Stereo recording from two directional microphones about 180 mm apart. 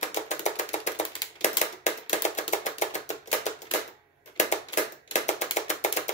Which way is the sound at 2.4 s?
40° left (ahead or behind).